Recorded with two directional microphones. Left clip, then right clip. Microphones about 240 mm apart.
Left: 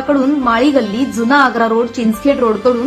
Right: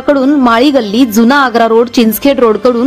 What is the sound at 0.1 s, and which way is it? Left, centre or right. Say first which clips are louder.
A woman's voice: right 5 dB; right.